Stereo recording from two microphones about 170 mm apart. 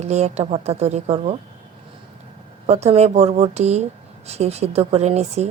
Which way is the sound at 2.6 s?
40° right (ahead or behind).